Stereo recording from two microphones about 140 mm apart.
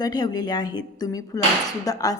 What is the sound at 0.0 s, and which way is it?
Speech, 30° left (ahead or behind).